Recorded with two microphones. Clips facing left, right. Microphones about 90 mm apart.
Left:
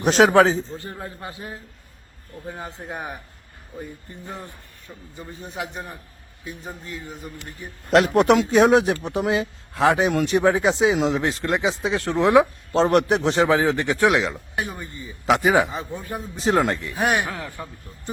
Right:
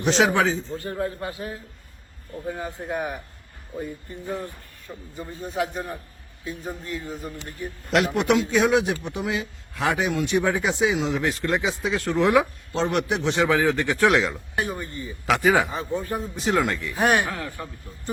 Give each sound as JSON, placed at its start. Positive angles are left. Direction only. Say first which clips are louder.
{"t": 0.0, "sound": "a man's voice", "louder": "left 5 dB", "side_deg": 45}
{"t": 0.8, "sound": "a man's voice", "louder": "right 6 dB", "side_deg": 20}
{"t": 2.6, "sound": "a man's voice", "louder": "right 4 dB", "side_deg": 25}
{"t": 6.4, "sound": "a man's voice", "louder": "right 3 dB", "side_deg": 25}
{"t": 7.9, "sound": "a man's voice", "louder": "left 5 dB", "side_deg": 40}
{"t": 12.7, "sound": "a man's voice", "louder": "left 6 dB", "side_deg": 40}
{"t": 16.4, "sound": "a man's voice", "louder": "left 4 dB", "side_deg": 35}
{"t": 16.9, "sound": "a man's voice", "louder": "right 1 dB", "side_deg": 10}